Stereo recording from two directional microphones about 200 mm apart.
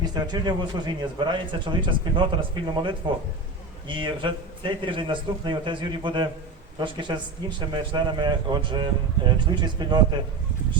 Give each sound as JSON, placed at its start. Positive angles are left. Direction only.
{"t": 0.0, "sound": "a man's voice", "side_deg": -20}